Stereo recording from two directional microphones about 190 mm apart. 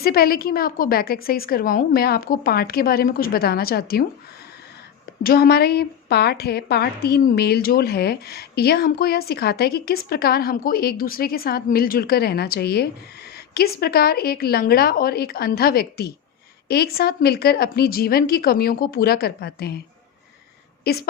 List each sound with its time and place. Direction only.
0.0 s a woman's voice: 55° left (ahead or behind)
5.2 s a woman's voice: 55° left (ahead or behind)
20.8 s a woman's voice: 55° left (ahead or behind)